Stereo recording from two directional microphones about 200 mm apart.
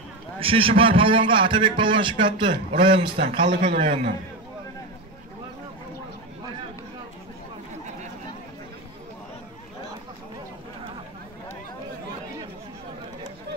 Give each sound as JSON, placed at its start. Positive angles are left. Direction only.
{"t": 0.4, "sound": "a man's voice", "side_deg": -25}
{"t": 3.2, "sound": "a man's voice", "side_deg": -45}